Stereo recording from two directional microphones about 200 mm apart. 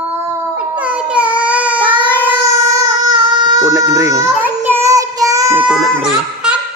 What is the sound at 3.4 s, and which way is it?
Baby cry, 15° right (ahead or behind).